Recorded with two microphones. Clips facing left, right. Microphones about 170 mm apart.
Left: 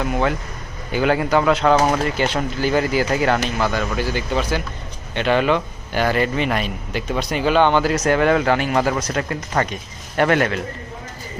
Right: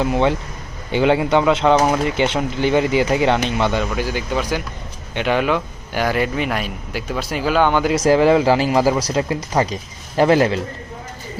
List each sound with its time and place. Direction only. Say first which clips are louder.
0.9 s speech: right 2 dB; 25° right (ahead or behind)
3.9 s speech: even; 10° right (ahead or behind)
8.0 s speech: right 6 dB; 30° right (ahead or behind)